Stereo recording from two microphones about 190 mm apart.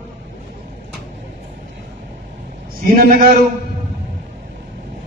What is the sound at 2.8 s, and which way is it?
Speech, 50° right (ahead or behind).